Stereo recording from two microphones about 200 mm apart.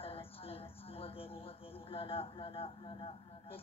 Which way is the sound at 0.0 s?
30° left (ahead or behind).